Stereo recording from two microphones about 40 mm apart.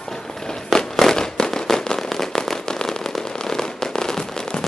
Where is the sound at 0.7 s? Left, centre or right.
Centre.